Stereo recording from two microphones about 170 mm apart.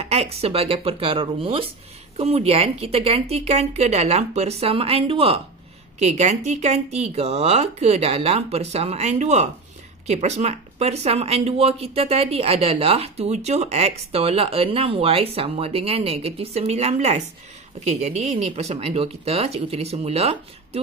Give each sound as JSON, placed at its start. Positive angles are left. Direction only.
{"t": 0.0, "sound": "speech", "side_deg": -35}